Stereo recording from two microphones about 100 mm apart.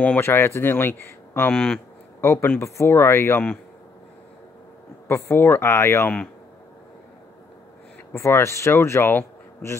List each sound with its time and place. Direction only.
0.0 s speech: 20° left (ahead or behind)
5.0 s speech: 25° left (ahead or behind)
8.1 s speech: 30° left (ahead or behind)